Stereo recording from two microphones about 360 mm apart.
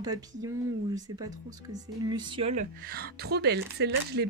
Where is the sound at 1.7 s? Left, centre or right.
Centre.